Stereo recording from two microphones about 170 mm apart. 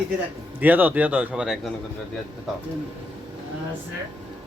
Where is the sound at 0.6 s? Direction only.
10° right (ahead or behind).